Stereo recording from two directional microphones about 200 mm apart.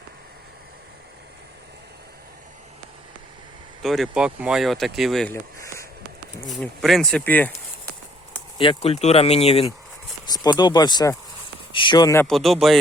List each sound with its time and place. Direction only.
3.8 s speech: centre (ahead or behind)
5.3 s a sound: 15° left (ahead or behind)
6.3 s speech: centre (ahead or behind)
8.5 s speech: 30° left (ahead or behind)
10.2 s speech: 20° left (ahead or behind)
11.7 s a sound: 25° left (ahead or behind)
12.2 s speech: centre (ahead or behind)